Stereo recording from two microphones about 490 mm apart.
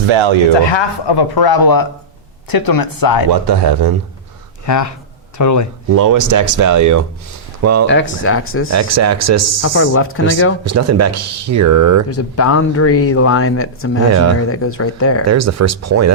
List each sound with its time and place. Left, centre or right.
0.1 s speech: right
0.6 s speech: left
3.4 s speech: right
4.6 s speech: left
5.9 s speech: right
7.9 s speech: left
8.7 s speech: right
9.6 s speech: left
10.6 s speech: right
12.1 s speech: left
14.1 s speech: right
14.5 s speech: left
15.3 s speech: right